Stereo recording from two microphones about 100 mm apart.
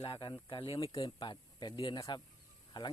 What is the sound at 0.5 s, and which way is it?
Speech, 65° left (ahead or behind).